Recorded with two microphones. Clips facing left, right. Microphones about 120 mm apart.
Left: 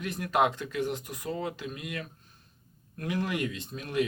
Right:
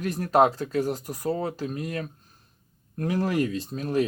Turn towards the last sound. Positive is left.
turn(degrees=-35)  # may be behind; listen again after turning